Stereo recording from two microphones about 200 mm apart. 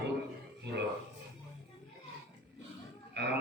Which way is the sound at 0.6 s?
60° right (ahead or behind).